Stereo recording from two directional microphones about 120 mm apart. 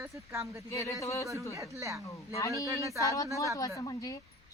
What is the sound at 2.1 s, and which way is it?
Speech, 25° left (ahead or behind).